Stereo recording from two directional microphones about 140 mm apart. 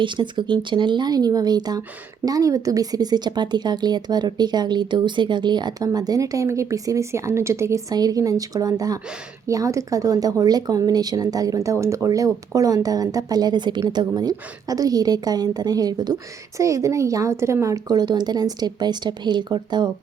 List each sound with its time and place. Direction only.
0.0 s a woman's voice: 35° right (ahead or behind)